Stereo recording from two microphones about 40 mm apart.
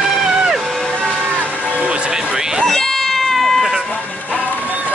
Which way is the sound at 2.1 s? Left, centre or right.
Centre.